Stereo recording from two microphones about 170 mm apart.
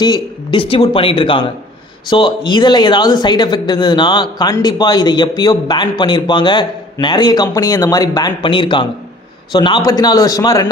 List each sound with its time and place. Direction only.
0.0 s speech: 25° left (ahead or behind)